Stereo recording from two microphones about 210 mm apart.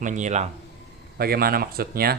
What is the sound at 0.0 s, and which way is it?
Speech, 35° right (ahead or behind).